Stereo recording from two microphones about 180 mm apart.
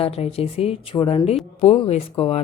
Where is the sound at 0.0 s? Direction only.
35° left (ahead or behind).